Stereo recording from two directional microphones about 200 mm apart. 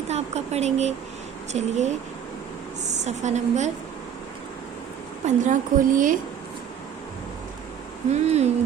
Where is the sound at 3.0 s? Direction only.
35° right (ahead or behind).